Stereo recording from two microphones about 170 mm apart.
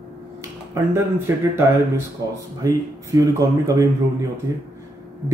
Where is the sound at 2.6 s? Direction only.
20° right (ahead or behind).